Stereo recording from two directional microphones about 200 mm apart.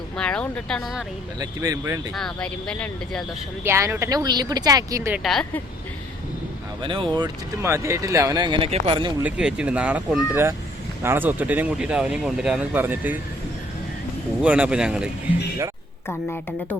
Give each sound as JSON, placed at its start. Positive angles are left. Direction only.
{"t": 0.2, "sound": "speech", "side_deg": 5}
{"t": 1.4, "sound": "speech", "side_deg": -15}
{"t": 2.1, "sound": "speech", "side_deg": 5}
{"t": 3.6, "sound": "speech", "side_deg": -15}
{"t": 5.2, "sound": "speech", "side_deg": 5}
{"t": 6.8, "sound": "speech", "side_deg": -25}
{"t": 9.2, "sound": "speech", "side_deg": -5}
{"t": 14.4, "sound": "speech", "side_deg": -5}
{"t": 16.0, "sound": "a woman's voice", "side_deg": 10}